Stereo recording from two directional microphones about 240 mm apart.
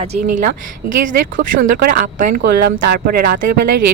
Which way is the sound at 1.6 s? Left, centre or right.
Right.